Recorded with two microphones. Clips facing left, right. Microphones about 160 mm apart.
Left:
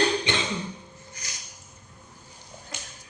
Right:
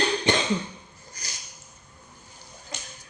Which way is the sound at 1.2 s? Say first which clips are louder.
Right 2 dB; 35° right (ahead or behind).